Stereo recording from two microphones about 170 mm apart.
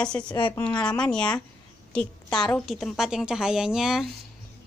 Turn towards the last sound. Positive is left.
turn(degrees=-5)  # may be behind; listen again after turning